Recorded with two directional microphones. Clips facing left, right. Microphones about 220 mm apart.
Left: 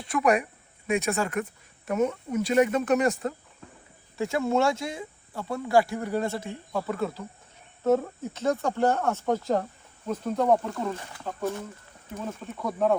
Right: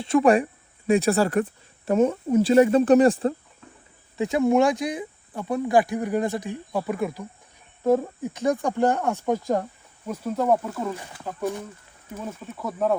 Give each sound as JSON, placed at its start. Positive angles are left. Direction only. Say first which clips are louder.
{"t": 0.0, "sound": "speech", "louder": "right 6 dB", "side_deg": -25}
{"t": 4.2, "sound": "speech", "louder": "right 5 dB", "side_deg": -20}